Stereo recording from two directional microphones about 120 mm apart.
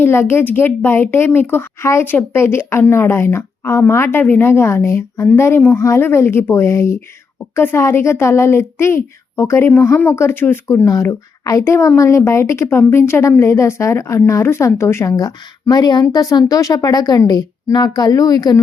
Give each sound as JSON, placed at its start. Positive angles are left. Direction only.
{"t": 0.0, "sound": "a woman's voice", "side_deg": 20}